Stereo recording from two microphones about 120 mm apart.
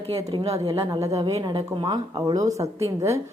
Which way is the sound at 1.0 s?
25° right (ahead or behind).